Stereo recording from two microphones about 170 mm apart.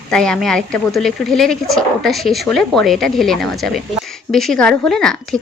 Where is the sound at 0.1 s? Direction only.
5° left (ahead or behind).